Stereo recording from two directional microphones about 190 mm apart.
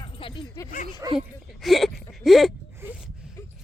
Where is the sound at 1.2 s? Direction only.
Centre (ahead or behind).